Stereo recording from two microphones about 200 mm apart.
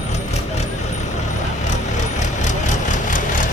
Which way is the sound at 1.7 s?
35° left (ahead or behind).